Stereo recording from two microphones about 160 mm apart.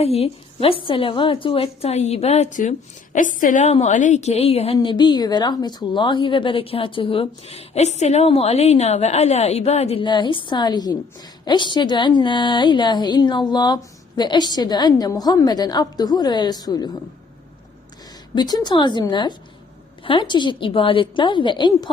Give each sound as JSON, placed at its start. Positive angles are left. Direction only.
{"t": 0.0, "sound": "a woman's voice", "side_deg": 40}
{"t": 18.3, "sound": "a woman's voice", "side_deg": 25}